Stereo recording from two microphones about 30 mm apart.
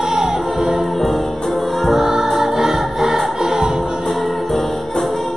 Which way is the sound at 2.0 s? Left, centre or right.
Centre.